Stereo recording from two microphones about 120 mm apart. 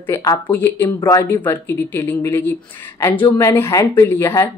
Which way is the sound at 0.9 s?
30° left (ahead or behind).